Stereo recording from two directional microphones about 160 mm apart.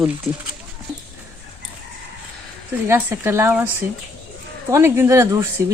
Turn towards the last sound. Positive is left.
turn(degrees=-20)  # may be behind; listen again after turning